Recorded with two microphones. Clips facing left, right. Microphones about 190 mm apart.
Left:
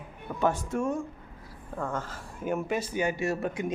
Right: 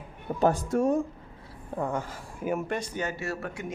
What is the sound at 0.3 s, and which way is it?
Speech, 35° right (ahead or behind).